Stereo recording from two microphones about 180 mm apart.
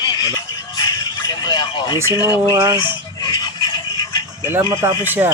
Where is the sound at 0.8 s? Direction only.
20° left (ahead or behind).